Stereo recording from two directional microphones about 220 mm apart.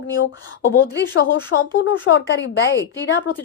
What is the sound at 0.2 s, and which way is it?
A woman's voice, 55° left (ahead or behind).